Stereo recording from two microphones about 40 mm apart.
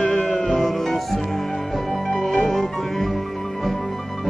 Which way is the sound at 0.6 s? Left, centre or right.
Centre.